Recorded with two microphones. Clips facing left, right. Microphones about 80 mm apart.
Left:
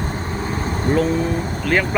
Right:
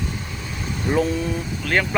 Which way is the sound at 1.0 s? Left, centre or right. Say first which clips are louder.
Left 4 dB; left.